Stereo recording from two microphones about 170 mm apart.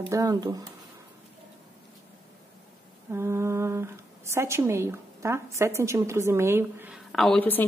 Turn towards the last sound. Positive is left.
turn(degrees=10)  # may be behind; listen again after turning